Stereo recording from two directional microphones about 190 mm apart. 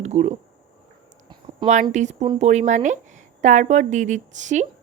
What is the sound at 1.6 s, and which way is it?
Speech, 40° right (ahead or behind).